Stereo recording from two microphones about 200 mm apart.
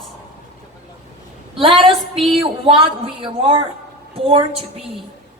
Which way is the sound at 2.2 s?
Centre (ahead or behind).